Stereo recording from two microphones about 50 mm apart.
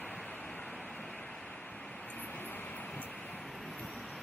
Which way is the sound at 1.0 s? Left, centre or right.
Centre.